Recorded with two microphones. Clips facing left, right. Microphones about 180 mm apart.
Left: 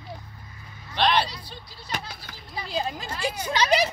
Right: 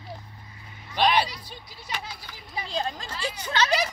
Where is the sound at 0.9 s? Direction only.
10° right (ahead or behind).